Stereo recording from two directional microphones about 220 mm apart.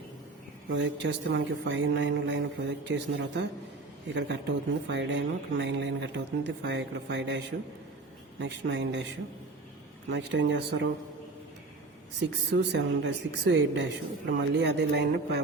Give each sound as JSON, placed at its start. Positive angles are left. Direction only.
{"t": 0.7, "sound": "a man's voice", "side_deg": -55}
{"t": 10.1, "sound": "speech", "side_deg": -50}
{"t": 12.2, "sound": "speech", "side_deg": -50}